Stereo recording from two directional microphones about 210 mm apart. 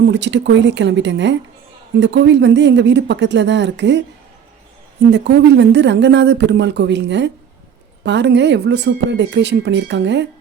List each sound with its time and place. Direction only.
0.1 s speech: 55° right (ahead or behind)
5.1 s speech: 55° right (ahead or behind)